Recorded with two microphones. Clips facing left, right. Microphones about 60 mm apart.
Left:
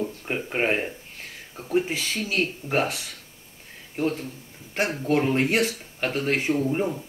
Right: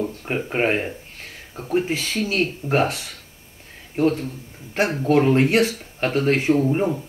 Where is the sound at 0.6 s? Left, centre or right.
Centre.